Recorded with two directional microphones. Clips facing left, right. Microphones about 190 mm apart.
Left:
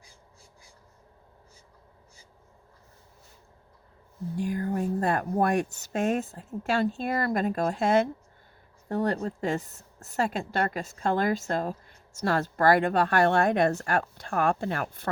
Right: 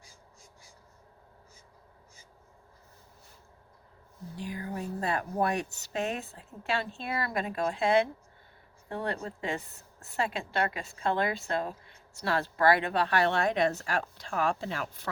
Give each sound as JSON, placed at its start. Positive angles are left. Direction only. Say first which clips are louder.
{"t": 4.4, "sound": "a woman's voice", "louder": "left 8 dB", "side_deg": 50}